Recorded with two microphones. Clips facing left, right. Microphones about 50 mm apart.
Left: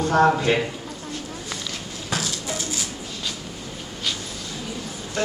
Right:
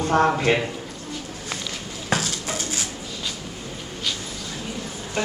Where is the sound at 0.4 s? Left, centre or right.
Centre.